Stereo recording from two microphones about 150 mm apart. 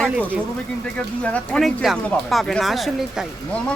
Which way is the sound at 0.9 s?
10° left (ahead or behind).